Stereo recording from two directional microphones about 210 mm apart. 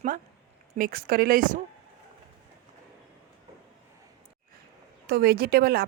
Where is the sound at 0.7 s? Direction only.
40° right (ahead or behind).